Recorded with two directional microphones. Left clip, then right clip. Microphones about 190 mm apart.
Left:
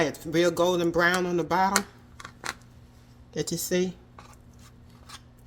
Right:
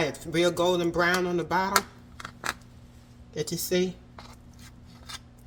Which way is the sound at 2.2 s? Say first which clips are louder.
Right 3 dB; centre (ahead or behind).